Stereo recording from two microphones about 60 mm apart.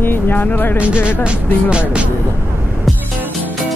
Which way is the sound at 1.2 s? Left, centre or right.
Centre.